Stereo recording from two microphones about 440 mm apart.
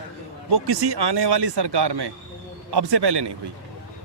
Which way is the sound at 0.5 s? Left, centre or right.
Right.